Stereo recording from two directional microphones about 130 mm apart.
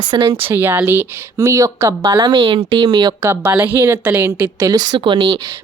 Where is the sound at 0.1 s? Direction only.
35° right (ahead or behind).